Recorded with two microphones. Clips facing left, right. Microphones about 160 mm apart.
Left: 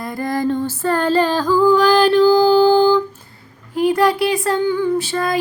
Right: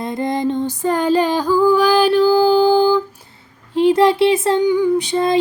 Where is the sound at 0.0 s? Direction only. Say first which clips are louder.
Right 1 dB; 20° right (ahead or behind).